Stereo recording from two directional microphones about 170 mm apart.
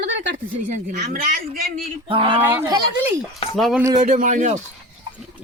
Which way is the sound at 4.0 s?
50° right (ahead or behind).